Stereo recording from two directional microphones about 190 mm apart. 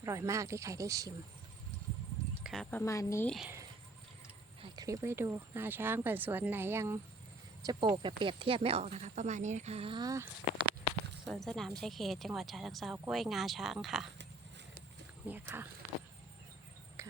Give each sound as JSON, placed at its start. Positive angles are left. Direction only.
{"t": 0.0, "sound": "speech", "side_deg": -15}
{"t": 2.4, "sound": "a woman's voice", "side_deg": 0}
{"t": 3.2, "sound": "speech", "side_deg": 0}
{"t": 4.6, "sound": "speech", "side_deg": -20}
{"t": 11.3, "sound": "speech", "side_deg": 0}
{"t": 15.3, "sound": "speech", "side_deg": -10}
{"t": 17.0, "sound": "cricket", "side_deg": -15}